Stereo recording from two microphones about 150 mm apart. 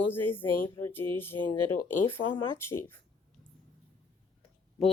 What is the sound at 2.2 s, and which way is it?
Speech, 35° left (ahead or behind).